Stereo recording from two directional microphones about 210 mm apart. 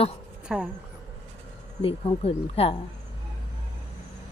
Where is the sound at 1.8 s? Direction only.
25° left (ahead or behind).